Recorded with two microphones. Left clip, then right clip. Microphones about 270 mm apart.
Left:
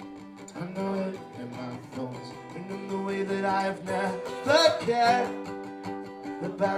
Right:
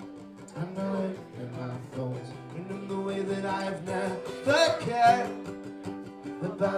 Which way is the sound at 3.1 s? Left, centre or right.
Left.